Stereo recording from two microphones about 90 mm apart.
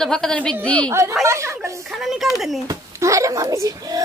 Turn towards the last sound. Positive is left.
turn(degrees=-40)  # may be behind; listen again after turning